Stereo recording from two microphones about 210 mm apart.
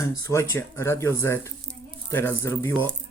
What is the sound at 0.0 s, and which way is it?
Speech, 15° left (ahead or behind).